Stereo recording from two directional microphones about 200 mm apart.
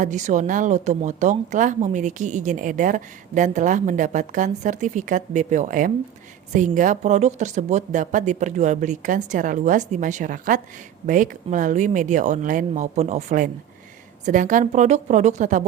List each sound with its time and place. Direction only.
0.0 s a woman's voice: 35° right (ahead or behind)